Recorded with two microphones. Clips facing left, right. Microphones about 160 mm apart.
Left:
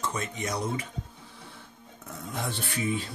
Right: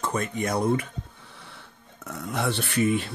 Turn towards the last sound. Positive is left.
turn(degrees=-70)  # may be behind; listen again after turning